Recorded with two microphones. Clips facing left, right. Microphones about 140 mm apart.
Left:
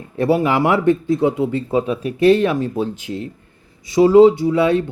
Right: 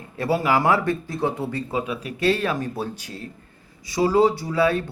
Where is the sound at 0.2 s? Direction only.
25° left (ahead or behind).